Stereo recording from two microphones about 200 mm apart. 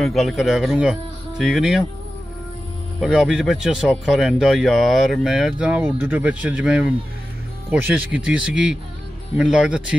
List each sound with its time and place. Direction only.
0.0 s speech: centre (ahead or behind)
3.0 s speech: 5° right (ahead or behind)